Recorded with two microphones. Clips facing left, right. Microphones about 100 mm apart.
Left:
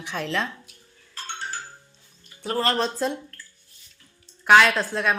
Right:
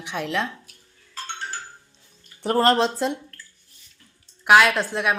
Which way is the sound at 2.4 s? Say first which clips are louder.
Right 6 dB; 50° right (ahead or behind).